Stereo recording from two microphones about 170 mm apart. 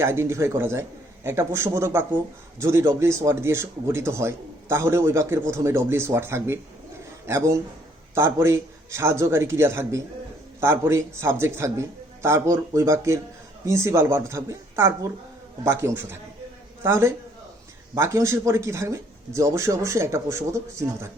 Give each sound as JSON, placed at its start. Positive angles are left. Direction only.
{"t": 0.0, "sound": "speech", "side_deg": -15}